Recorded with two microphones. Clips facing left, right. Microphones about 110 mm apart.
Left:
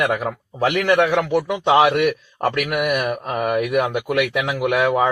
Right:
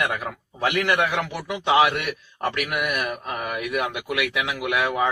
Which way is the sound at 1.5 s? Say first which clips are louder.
Left 3 dB; 35° left (ahead or behind).